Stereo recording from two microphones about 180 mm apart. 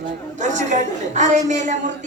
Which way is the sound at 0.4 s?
40° right (ahead or behind).